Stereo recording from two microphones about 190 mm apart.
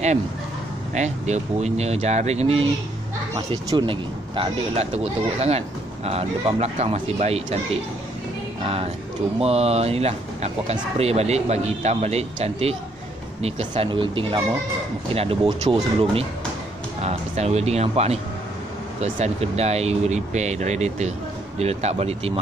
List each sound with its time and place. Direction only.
0.9 s speech: 35° right (ahead or behind)